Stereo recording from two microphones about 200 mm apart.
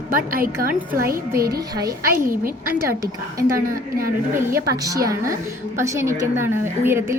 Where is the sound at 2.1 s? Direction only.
50° right (ahead or behind).